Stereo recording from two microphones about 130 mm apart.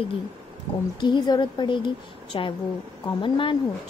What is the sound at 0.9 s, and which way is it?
A woman's voice, 35° left (ahead or behind).